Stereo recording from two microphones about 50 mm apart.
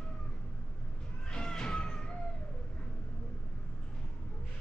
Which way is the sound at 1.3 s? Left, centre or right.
Centre.